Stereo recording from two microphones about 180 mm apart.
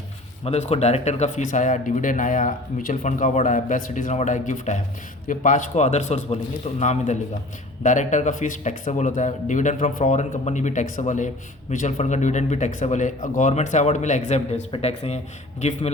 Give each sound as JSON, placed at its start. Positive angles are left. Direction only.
{"t": 0.4, "sound": "speech", "side_deg": 35}